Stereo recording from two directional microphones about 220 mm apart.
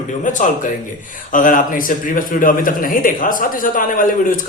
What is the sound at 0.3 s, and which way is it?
A man's voice, 35° left (ahead or behind).